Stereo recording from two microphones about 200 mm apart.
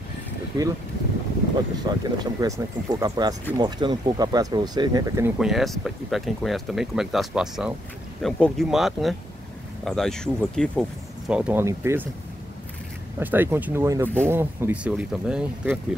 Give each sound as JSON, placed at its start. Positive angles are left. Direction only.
{"t": 0.5, "sound": "speech", "side_deg": -15}
{"t": 1.8, "sound": "speech", "side_deg": -20}
{"t": 5.4, "sound": "speech", "side_deg": 0}
{"t": 13.2, "sound": "speech", "side_deg": -10}